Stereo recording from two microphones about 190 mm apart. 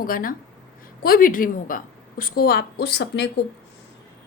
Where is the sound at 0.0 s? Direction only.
50° left (ahead or behind).